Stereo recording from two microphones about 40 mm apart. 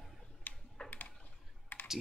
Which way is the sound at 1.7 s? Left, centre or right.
Left.